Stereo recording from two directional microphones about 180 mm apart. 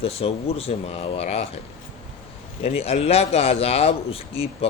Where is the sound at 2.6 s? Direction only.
35° left (ahead or behind).